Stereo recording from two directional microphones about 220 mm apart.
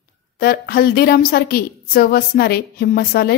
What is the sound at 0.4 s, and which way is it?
A woman's voice, 45° left (ahead or behind).